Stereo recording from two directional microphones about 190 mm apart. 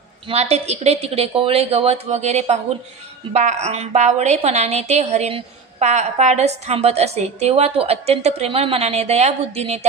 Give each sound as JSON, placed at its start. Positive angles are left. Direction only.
{"t": 0.3, "sound": "a woman's voice", "side_deg": -35}